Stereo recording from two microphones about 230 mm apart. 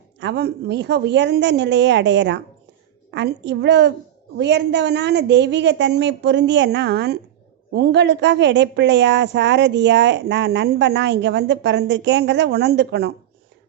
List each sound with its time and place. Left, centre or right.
0.2 s a woman's voice: right